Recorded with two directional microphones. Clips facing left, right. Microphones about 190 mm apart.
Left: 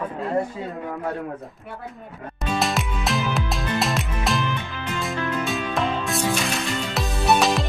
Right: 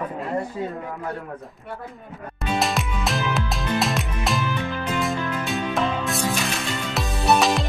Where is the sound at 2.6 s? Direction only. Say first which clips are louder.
Even; centre (ahead or behind).